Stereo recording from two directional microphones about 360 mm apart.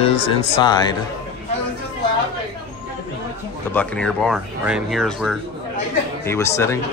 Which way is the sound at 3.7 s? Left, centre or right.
Centre.